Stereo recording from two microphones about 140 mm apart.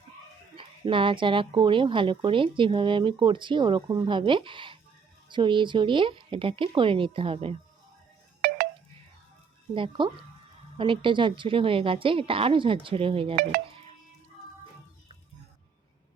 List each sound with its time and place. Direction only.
0.5 s speech: 35° right (ahead or behind)
8.4 s wind chime: 90° right
9.7 s speech: 40° right (ahead or behind)